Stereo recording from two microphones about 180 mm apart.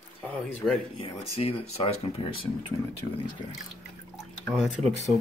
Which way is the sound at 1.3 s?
35° left (ahead or behind).